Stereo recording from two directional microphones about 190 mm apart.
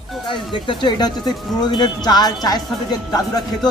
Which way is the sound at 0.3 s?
25° left (ahead or behind).